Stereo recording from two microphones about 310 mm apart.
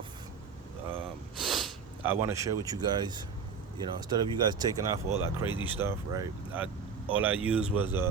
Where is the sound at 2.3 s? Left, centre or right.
Centre.